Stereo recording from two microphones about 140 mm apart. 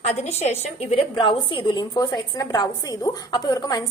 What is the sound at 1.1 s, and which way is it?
A woman's voice, 35° left (ahead or behind).